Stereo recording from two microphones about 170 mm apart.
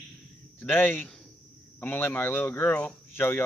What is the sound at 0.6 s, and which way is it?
Speech, 10° left (ahead or behind).